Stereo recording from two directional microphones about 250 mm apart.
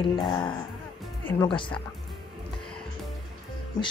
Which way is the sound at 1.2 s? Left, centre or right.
Centre.